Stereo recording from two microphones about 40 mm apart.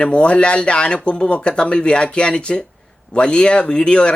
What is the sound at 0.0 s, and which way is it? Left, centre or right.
Speech, left.